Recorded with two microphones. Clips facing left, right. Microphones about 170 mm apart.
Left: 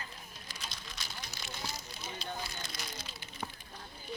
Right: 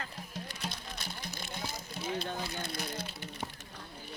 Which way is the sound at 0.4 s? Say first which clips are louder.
Right 6 dB; 60° right (ahead or behind).